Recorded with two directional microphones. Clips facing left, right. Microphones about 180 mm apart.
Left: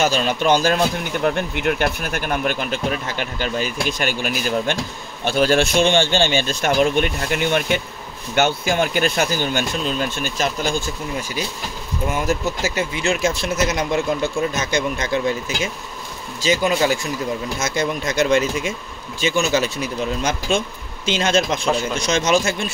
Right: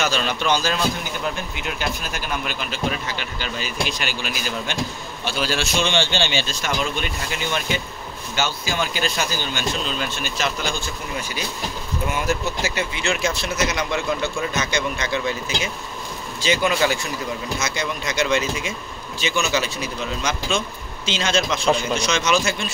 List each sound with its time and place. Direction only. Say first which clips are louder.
0.0 s speech: left 4 dB; 45° left (ahead or behind)
12.1 s speech: left 3 dB; 45° left (ahead or behind)